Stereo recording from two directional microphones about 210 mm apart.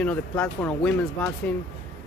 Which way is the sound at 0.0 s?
5° left (ahead or behind).